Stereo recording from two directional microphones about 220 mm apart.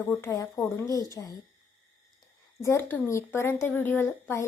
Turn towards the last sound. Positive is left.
turn(degrees=10)  # may be behind; listen again after turning